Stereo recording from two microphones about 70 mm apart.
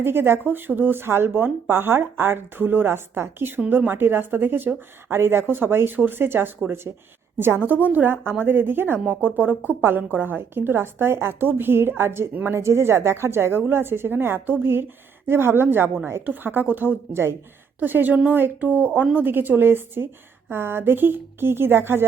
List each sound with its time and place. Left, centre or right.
0.0 s a woman's voice: right
12.3 s a woman's voice: right
12.5 s a woman's voice: right